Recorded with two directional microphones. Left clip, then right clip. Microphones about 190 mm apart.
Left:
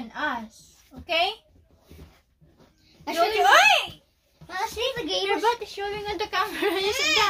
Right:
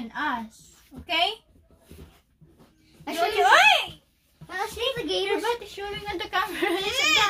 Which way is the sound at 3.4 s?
25° left (ahead or behind).